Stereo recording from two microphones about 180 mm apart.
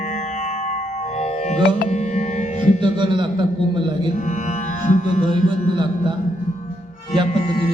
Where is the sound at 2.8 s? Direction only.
25° right (ahead or behind).